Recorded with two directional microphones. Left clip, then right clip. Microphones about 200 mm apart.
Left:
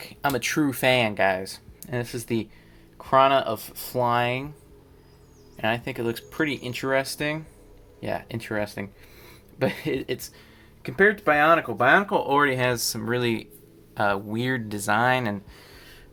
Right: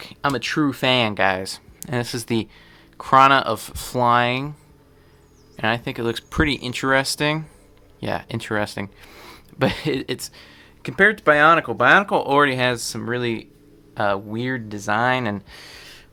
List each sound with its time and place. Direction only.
0.0 s speech: 25° right (ahead or behind)
5.5 s speech: 35° right (ahead or behind); by 15.4 s 10° right (ahead or behind)
15.4 s a sound: 35° right (ahead or behind)